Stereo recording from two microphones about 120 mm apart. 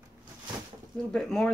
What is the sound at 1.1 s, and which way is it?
Speech, 5° left (ahead or behind).